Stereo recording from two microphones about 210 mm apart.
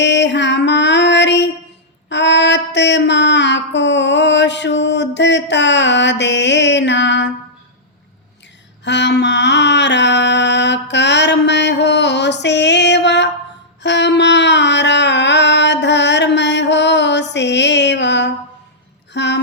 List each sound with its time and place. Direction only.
0.0 s music: 55° left (ahead or behind)
2.0 s mantra: 55° left (ahead or behind)
8.8 s mantra: 55° left (ahead or behind)
13.8 s a sound: 55° left (ahead or behind)